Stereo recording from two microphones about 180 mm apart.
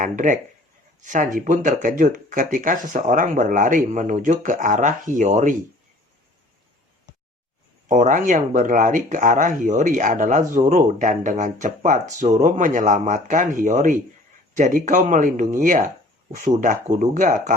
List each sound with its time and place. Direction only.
0.0 s speech: 45° right (ahead or behind)
7.9 s speech: 45° right (ahead or behind)